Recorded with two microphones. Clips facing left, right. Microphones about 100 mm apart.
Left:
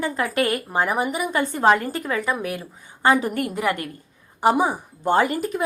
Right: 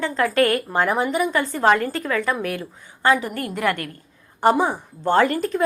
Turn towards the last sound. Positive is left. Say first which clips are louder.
# right 2 dB
turn(degrees=10)  # may be behind; listen again after turning